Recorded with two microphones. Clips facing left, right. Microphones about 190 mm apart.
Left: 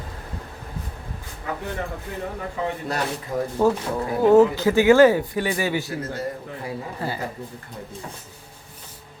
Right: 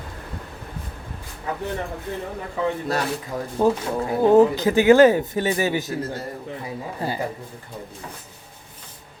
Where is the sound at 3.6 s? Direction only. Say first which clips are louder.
Right 2 dB; 15° right (ahead or behind).